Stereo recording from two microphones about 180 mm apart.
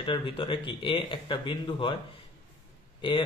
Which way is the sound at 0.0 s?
25° left (ahead or behind).